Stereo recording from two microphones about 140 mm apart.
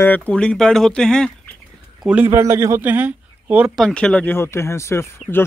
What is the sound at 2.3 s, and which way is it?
A man's voice, 20° right (ahead or behind).